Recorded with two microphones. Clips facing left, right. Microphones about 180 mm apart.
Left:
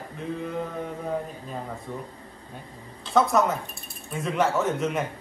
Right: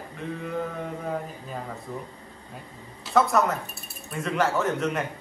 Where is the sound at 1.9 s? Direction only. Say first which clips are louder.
Even; centre (ahead or behind).